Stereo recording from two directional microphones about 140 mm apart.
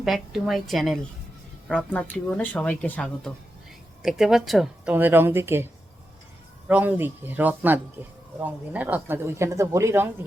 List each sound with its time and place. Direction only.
0.0 s a woman's voice: centre (ahead or behind)
4.0 s speech: 5° right (ahead or behind)
6.7 s speech: 10° right (ahead or behind)